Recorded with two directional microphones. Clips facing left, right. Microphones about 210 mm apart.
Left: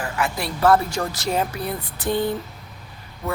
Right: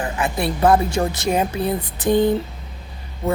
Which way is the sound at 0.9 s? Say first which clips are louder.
Right 4 dB; 20° right (ahead or behind).